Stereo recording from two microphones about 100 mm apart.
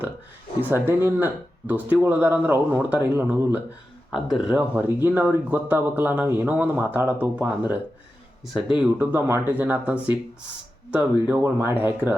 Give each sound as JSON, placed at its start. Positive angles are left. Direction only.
{"t": 0.7, "sound": "speech", "side_deg": -20}
{"t": 4.1, "sound": "speech", "side_deg": -5}
{"t": 4.5, "sound": "speech", "side_deg": -20}